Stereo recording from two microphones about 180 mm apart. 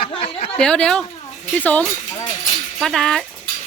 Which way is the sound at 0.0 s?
30° left (ahead or behind).